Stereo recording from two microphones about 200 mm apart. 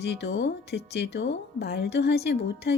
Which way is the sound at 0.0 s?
55° left (ahead or behind).